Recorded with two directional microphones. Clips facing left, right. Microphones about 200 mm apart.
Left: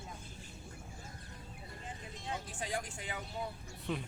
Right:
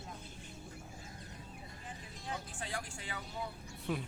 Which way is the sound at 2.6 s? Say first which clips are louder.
Left 3 dB; 20° left (ahead or behind).